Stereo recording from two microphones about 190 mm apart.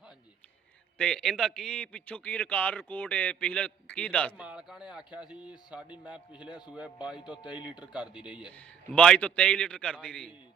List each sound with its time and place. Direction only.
0.9 s a man's voice: 5° left (ahead or behind)
4.4 s a man's voice: 5° right (ahead or behind)
7.4 s speech: 25° left (ahead or behind)
8.3 s a man's voice: 5° right (ahead or behind)